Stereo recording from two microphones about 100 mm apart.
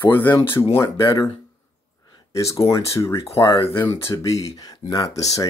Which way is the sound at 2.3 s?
30° left (ahead or behind).